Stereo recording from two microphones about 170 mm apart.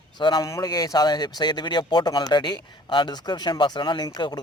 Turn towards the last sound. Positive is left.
turn(degrees=25)  # may be behind; listen again after turning